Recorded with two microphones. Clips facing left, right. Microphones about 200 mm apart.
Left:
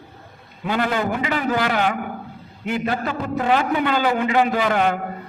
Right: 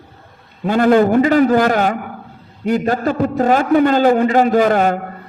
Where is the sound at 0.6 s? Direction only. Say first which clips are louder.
Right 10 dB; 45° right (ahead or behind).